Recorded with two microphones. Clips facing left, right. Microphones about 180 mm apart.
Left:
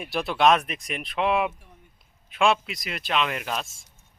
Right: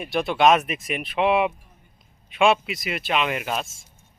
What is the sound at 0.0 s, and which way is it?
Speech, centre (ahead or behind).